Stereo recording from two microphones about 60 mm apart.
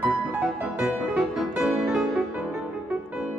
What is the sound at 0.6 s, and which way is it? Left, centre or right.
Music, centre.